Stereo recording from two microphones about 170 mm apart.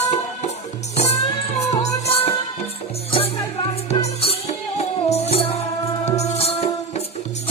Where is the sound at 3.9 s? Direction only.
40° left (ahead or behind).